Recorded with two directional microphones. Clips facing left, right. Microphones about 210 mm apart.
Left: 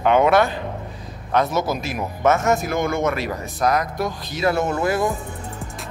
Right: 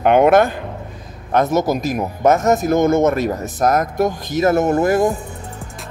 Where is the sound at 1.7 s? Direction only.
40° right (ahead or behind).